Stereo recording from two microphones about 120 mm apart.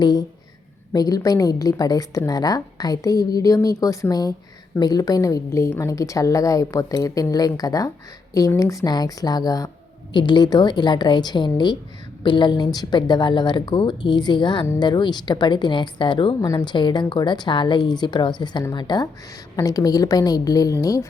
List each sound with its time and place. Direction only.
0.0 s a woman's voice: 40° left (ahead or behind)
16.4 s a woman's voice: 30° left (ahead or behind)